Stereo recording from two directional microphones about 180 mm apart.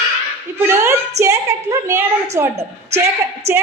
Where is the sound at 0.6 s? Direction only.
15° right (ahead or behind).